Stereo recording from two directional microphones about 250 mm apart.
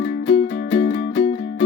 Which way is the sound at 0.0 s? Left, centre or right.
Left.